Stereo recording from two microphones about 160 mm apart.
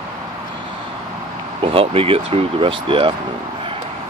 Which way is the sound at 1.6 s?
35° right (ahead or behind).